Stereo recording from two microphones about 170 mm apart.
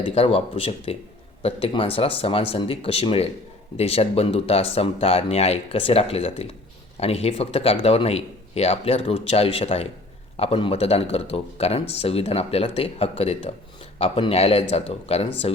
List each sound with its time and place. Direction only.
0.0 s speech: 35° left (ahead or behind)